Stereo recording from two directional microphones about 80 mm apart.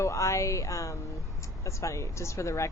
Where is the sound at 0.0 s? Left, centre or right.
Left.